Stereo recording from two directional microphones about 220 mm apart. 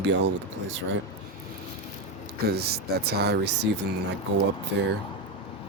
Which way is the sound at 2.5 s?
45° right (ahead or behind).